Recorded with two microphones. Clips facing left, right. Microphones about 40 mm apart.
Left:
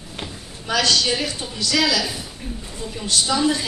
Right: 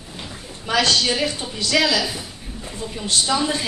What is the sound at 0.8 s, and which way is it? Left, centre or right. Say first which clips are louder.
A woman's voice: right 1 dB; right.